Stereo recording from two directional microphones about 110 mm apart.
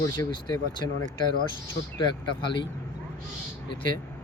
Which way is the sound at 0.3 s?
45° left (ahead or behind).